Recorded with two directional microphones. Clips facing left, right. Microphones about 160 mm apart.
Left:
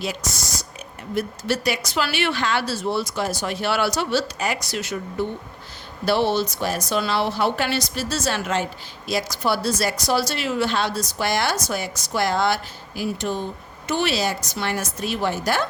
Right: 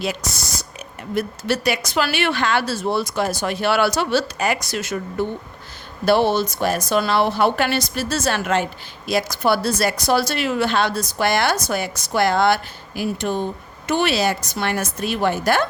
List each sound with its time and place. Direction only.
0.0 s speech: 60° right (ahead or behind)